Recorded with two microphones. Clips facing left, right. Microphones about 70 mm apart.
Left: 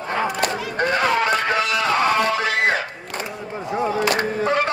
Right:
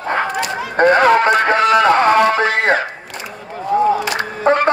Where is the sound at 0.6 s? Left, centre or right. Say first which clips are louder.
Right 13 dB; right.